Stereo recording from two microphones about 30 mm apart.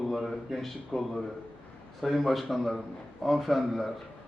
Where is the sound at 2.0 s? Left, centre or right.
Centre.